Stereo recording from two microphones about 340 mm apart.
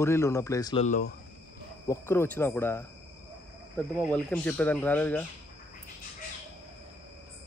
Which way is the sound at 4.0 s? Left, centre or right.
Centre.